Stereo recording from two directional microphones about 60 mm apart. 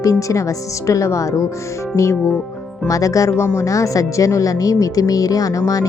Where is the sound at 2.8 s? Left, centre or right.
Left.